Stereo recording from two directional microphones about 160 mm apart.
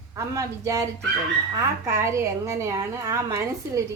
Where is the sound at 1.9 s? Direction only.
15° right (ahead or behind).